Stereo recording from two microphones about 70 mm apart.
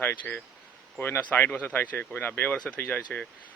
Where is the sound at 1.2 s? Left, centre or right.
Centre.